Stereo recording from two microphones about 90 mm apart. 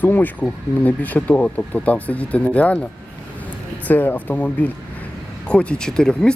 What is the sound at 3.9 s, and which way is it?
Speech, 20° left (ahead or behind).